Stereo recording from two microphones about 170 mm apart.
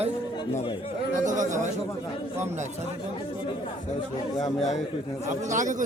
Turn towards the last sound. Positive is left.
turn(degrees=-50)  # may be behind; listen again after turning